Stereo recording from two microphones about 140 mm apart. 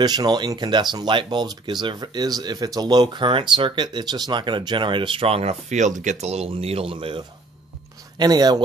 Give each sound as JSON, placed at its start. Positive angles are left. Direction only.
{"t": 0.0, "sound": "speech", "side_deg": -30}
{"t": 8.2, "sound": "speech", "side_deg": -30}